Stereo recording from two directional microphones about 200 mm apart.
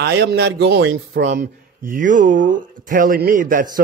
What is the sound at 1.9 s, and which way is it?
Speech, 40° right (ahead or behind).